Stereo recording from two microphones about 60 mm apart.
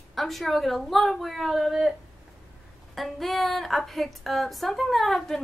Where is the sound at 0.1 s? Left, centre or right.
Centre.